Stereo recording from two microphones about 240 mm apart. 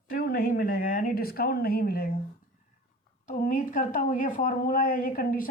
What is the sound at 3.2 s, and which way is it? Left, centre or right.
A woman's voice, left.